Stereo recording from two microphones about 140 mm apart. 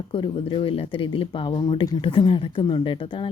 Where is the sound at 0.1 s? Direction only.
35° left (ahead or behind).